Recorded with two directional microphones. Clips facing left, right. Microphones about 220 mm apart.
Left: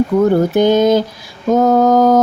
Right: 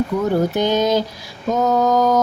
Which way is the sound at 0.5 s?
50° left (ahead or behind).